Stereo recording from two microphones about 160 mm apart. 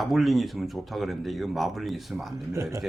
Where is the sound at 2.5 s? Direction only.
20° right (ahead or behind).